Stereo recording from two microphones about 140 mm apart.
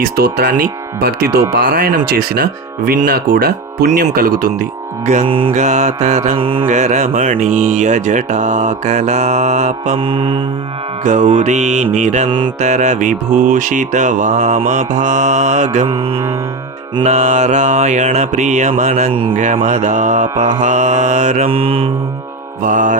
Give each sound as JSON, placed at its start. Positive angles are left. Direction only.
{"t": 0.0, "sound": "speech", "side_deg": -90}
{"t": 5.2, "sound": "mantra", "side_deg": -40}
{"t": 5.5, "sound": "mantra", "side_deg": -55}
{"t": 6.7, "sound": "mantra", "side_deg": -55}
{"t": 10.0, "sound": "mantra", "side_deg": -40}
{"t": 11.0, "sound": "mantra", "side_deg": -55}
{"t": 15.9, "sound": "mantra", "side_deg": -40}
{"t": 17.0, "sound": "mantra", "side_deg": -55}
{"t": 21.5, "sound": "mantra", "side_deg": -40}
{"t": 22.6, "sound": "mantra", "side_deg": -65}